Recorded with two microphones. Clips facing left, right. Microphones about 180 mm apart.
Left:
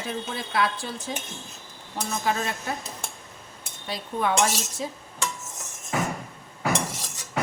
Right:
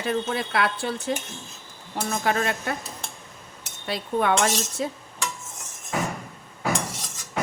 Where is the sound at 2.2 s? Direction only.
65° right (ahead or behind).